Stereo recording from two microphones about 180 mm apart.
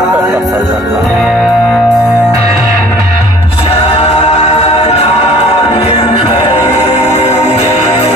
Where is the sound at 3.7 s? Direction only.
35° left (ahead or behind).